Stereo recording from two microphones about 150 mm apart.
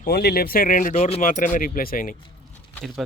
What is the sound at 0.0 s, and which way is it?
Speech, 90° left.